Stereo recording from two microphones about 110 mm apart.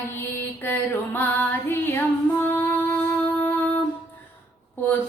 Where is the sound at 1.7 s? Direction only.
20° left (ahead or behind).